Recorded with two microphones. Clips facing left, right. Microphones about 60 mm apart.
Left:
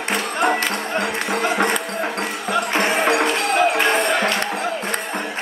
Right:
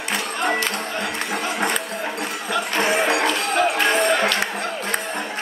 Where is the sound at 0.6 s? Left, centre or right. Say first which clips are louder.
Left 3 dB; left.